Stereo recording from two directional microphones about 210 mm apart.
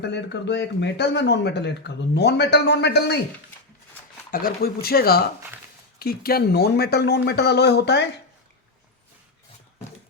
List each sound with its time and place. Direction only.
0.0 s speech: 55° left (ahead or behind)
4.3 s speech: 45° left (ahead or behind)